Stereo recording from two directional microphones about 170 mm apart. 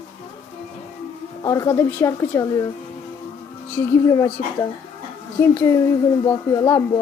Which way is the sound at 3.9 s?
20° left (ahead or behind).